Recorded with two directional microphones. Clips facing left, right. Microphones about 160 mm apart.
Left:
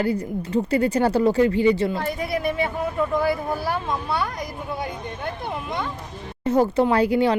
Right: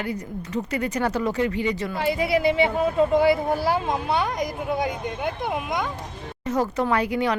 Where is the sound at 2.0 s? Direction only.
85° right.